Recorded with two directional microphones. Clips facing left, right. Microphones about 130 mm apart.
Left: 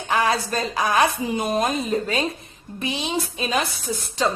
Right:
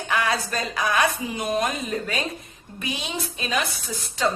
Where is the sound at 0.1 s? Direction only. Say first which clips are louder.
Left 4 dB; 30° left (ahead or behind).